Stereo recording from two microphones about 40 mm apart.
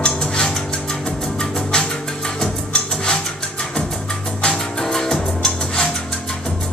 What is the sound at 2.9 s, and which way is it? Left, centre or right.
Music, centre.